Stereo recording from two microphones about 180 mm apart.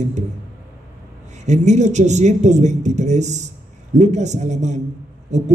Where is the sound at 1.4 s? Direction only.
40° right (ahead or behind).